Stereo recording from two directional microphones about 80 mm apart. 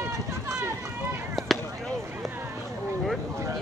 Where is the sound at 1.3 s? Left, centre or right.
Centre.